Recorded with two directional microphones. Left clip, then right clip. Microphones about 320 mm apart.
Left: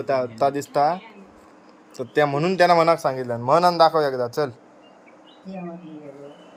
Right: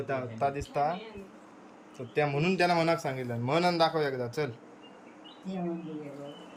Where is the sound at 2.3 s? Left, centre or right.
Centre.